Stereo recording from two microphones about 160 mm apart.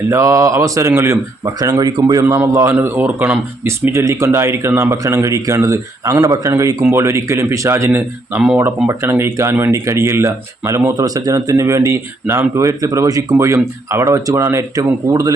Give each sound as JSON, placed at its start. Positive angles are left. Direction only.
{"t": 0.1, "sound": "speech", "side_deg": -20}